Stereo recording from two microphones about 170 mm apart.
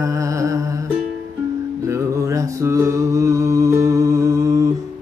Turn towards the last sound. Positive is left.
turn(degrees=-20)  # may be behind; listen again after turning